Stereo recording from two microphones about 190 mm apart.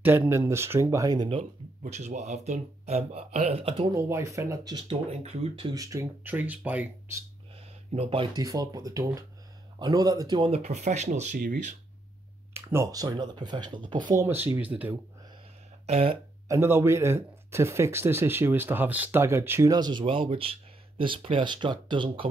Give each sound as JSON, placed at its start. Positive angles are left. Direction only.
{"t": 0.0, "sound": "speech", "side_deg": -10}
{"t": 1.8, "sound": "speech", "side_deg": -35}
{"t": 3.9, "sound": "speech", "side_deg": -15}
{"t": 5.8, "sound": "speech", "side_deg": -15}
{"t": 7.9, "sound": "speech", "side_deg": -30}
{"t": 12.5, "sound": "speech", "side_deg": -15}
{"t": 14.2, "sound": "speech", "side_deg": -10}
{"t": 15.9, "sound": "speech", "side_deg": -30}
{"t": 16.4, "sound": "speech", "side_deg": -15}